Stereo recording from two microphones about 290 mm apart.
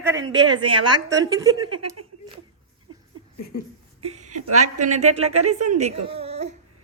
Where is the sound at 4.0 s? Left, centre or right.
Right.